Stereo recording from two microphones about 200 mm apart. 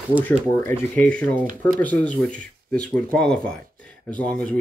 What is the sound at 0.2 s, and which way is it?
Speech, 10° left (ahead or behind).